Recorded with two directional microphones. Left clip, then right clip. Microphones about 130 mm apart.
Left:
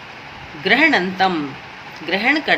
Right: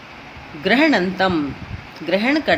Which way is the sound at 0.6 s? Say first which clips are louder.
Left 1 dB; 40° right (ahead or behind).